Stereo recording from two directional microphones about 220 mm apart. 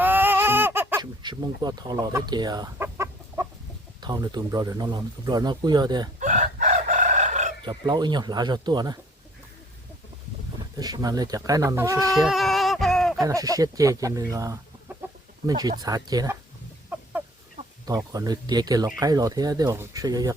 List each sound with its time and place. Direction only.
0.0 s fowl: 10° right (ahead or behind)
4.0 s speech: 20° right (ahead or behind)
6.1 s chicken: 35° right (ahead or behind)
7.6 s speech: 20° right (ahead or behind)
10.8 s speech: 15° right (ahead or behind)
12.2 s a sound: centre (ahead or behind)
13.1 s speech: 15° right (ahead or behind)
16.9 s chicken: 10° right (ahead or behind)
17.8 s speech: 15° right (ahead or behind)